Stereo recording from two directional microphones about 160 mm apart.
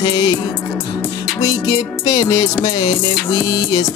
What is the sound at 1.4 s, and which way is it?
Music, 25° left (ahead or behind).